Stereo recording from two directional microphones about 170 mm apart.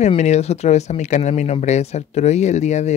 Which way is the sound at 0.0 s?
40° left (ahead or behind).